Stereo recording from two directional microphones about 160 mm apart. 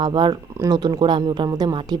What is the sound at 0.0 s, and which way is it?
Speech, 30° right (ahead or behind).